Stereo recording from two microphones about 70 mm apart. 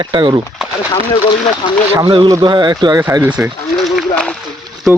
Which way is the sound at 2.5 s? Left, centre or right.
Right.